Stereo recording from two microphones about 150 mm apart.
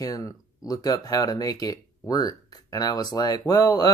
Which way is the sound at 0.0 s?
25° left (ahead or behind).